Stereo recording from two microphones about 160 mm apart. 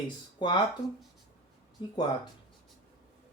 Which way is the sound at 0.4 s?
30° left (ahead or behind).